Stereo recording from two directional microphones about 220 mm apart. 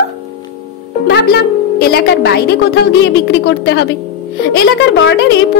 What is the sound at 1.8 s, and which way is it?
A woman's voice, 45° left (ahead or behind).